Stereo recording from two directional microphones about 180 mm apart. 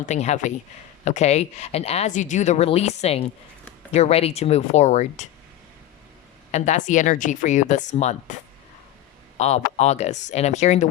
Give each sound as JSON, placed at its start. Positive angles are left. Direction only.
{"t": 0.0, "sound": "speech", "side_deg": 40}
{"t": 6.5, "sound": "speech", "side_deg": 40}
{"t": 9.4, "sound": "speech", "side_deg": 40}